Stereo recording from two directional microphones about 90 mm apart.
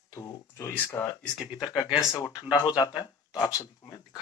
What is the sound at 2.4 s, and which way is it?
Speech, 50° left (ahead or behind).